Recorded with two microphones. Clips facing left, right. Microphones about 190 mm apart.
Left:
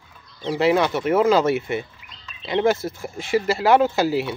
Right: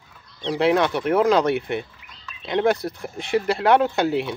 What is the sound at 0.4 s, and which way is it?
Speech, 5° left (ahead or behind).